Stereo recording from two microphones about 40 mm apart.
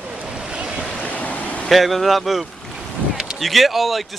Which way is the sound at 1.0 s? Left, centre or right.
Left.